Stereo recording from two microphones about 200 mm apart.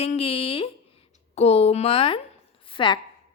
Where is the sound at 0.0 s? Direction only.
30° left (ahead or behind).